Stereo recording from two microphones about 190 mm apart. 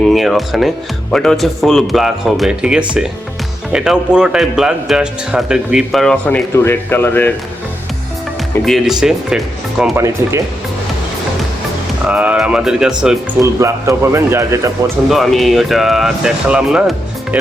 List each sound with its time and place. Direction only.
0.0 s a man's voice: centre (ahead or behind)
8.6 s a man's voice: centre (ahead or behind)
12.0 s a man's voice: 5° right (ahead or behind)
13.4 s a man's voice: 15° right (ahead or behind)
15.1 s a man's voice: centre (ahead or behind)